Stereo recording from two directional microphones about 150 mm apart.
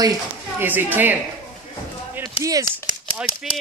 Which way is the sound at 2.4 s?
40° left (ahead or behind).